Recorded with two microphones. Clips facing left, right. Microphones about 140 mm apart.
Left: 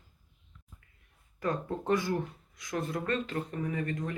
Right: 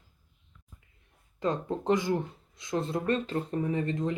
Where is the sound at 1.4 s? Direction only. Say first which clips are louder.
Right 3 dB; 20° right (ahead or behind).